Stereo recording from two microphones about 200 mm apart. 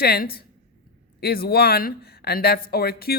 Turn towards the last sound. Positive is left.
turn(degrees=50)  # may be behind; listen again after turning